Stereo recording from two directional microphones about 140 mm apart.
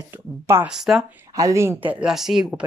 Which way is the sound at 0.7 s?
5° right (ahead or behind).